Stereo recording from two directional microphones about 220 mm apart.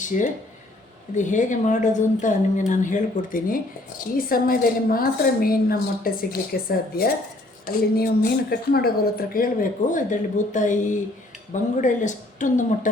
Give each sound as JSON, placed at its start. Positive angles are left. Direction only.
{"t": 0.0, "sound": "a woman's voice", "side_deg": 35}